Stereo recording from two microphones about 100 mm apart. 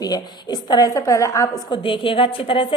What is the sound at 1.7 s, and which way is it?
A woman's voice, 60° left (ahead or behind).